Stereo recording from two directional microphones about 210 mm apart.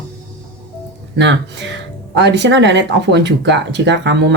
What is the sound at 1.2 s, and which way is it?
Speech, 55° right (ahead or behind).